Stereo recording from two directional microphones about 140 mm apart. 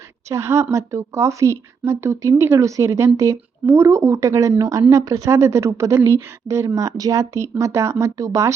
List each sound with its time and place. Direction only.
0.3 s speech: 20° right (ahead or behind)